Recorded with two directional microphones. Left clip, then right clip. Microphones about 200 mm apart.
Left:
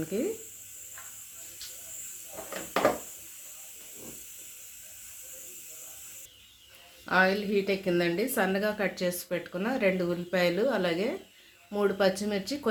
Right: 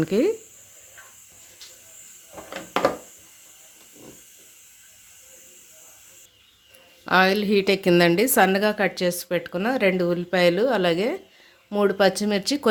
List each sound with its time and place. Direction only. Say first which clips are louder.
0.0 s speech: right 10 dB; 45° right (ahead or behind)
7.0 s a woman's voice: right 6 dB; 40° right (ahead or behind)